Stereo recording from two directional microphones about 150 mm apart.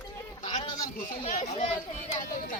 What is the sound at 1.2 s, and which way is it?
Speech, 45° left (ahead or behind).